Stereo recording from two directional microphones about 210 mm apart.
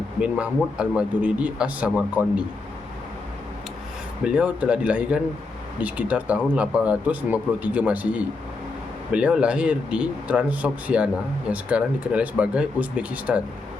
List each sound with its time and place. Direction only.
0.2 s speech: 5° right (ahead or behind)
4.2 s speech: 5° right (ahead or behind)